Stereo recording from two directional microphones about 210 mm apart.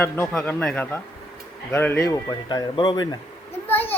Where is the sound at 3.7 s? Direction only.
10° left (ahead or behind).